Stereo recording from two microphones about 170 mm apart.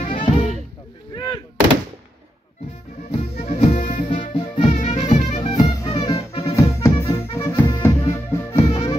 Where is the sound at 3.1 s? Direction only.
40° left (ahead or behind).